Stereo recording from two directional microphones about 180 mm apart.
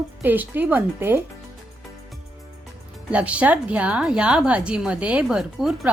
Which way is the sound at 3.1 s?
5° right (ahead or behind).